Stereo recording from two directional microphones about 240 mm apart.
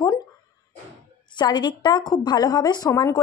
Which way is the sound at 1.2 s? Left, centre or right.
Centre.